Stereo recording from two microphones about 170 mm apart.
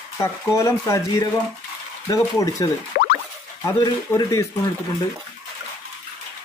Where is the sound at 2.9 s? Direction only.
60° left (ahead or behind).